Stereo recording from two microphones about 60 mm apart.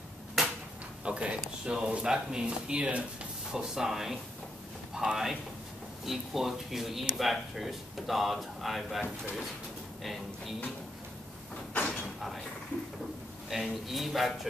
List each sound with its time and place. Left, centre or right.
0.4 s a sound: centre
1.0 s speech: centre
13.5 s speech: centre